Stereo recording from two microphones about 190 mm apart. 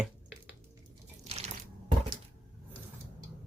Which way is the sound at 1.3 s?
35° right (ahead or behind).